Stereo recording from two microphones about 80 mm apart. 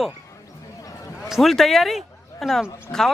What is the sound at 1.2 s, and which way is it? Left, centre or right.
A man's voice, centre.